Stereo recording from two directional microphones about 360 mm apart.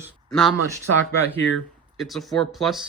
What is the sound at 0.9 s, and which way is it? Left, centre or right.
Speech, right.